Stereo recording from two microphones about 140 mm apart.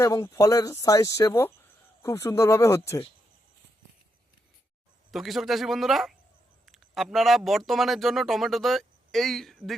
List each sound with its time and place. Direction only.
0.0 s speech: 25° left (ahead or behind)
5.1 s speech: centre (ahead or behind)